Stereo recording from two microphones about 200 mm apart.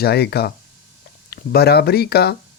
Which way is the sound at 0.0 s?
55° left (ahead or behind).